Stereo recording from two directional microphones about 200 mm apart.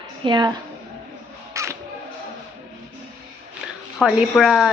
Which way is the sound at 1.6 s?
15° right (ahead or behind).